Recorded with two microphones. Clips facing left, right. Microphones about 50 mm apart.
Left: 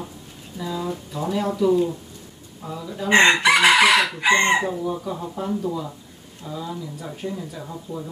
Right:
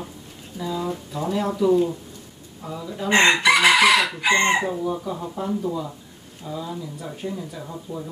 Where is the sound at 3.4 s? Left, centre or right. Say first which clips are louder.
Even; left.